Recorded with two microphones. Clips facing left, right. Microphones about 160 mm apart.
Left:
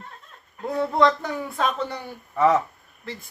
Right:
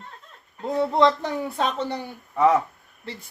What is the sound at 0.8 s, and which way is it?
A woman's voice, 25° right (ahead or behind).